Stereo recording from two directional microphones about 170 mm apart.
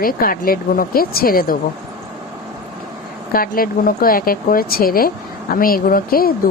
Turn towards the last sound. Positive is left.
turn(degrees=60)  # may be behind; listen again after turning